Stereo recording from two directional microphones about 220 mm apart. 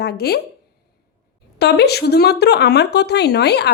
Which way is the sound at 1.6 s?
50° left (ahead or behind).